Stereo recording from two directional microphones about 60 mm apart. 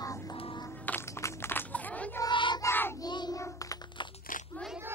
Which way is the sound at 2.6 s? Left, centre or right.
Left.